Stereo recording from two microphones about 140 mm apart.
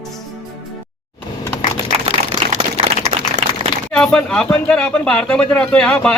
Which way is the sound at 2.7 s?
55° right (ahead or behind).